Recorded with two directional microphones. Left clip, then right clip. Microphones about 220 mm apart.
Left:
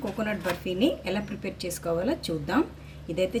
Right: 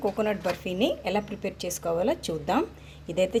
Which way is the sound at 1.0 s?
30° right (ahead or behind).